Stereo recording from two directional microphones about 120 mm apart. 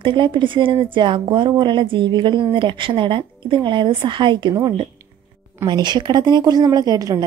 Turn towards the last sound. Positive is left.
turn(degrees=-30)  # may be behind; listen again after turning